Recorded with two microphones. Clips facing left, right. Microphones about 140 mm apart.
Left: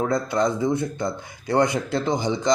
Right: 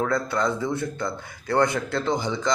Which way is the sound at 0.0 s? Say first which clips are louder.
Left 2 dB; 20° left (ahead or behind).